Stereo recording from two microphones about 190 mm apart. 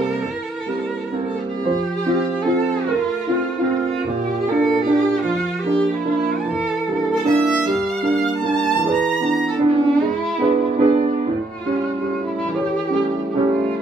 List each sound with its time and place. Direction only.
10.5 s music: 25° right (ahead or behind)